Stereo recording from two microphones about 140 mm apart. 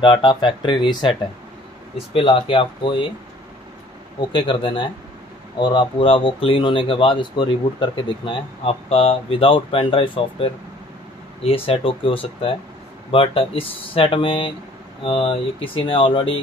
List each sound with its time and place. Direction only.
0.0 s speech: 35° left (ahead or behind)
2.1 s speech: 40° left (ahead or behind)
4.2 s speech: 35° left (ahead or behind)